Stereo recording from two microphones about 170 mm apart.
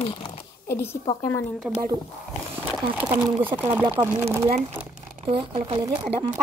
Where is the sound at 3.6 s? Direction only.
10° right (ahead or behind).